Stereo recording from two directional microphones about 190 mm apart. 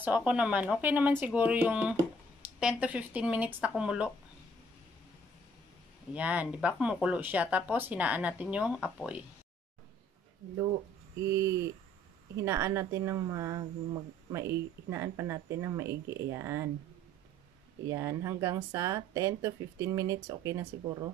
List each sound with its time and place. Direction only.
0.0 s a woman's voice: 5° right (ahead or behind)
6.1 s a woman's voice: 5° right (ahead or behind)
11.2 s a woman's voice: 15° right (ahead or behind)
17.8 s a woman's voice: 15° right (ahead or behind)